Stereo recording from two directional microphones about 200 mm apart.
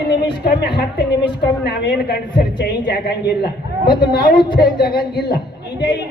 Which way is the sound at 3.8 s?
20° left (ahead or behind).